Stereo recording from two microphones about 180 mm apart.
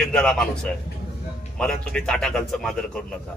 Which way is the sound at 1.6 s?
5° left (ahead or behind).